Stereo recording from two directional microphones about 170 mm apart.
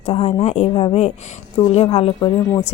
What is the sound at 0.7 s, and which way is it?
Speech, 30° left (ahead or behind).